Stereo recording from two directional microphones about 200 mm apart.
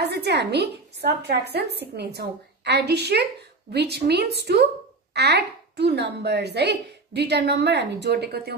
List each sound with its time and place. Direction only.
0.0 s a woman's voice: 55° right (ahead or behind)